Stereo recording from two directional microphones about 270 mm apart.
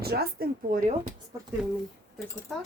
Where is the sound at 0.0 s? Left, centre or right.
Right.